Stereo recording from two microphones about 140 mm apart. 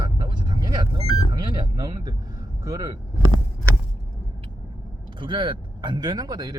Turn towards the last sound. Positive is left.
turn(degrees=-30)  # may be behind; listen again after turning